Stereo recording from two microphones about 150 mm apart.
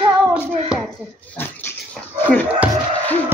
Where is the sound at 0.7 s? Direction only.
5° right (ahead or behind).